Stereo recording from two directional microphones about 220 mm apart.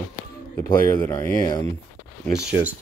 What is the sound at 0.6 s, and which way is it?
Speech, 10° left (ahead or behind).